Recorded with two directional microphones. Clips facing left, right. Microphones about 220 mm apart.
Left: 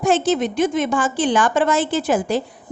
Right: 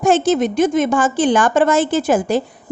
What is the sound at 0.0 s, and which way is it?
A woman's voice, 45° right (ahead or behind).